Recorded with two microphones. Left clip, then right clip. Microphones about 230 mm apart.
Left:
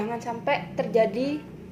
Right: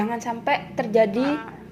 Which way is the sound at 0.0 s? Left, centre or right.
Right.